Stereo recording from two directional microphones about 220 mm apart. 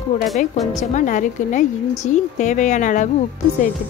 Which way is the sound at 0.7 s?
35° left (ahead or behind).